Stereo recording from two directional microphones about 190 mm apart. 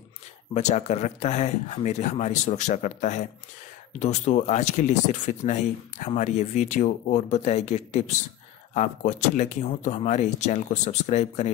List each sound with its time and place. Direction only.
0.6 s speech: 35° left (ahead or behind)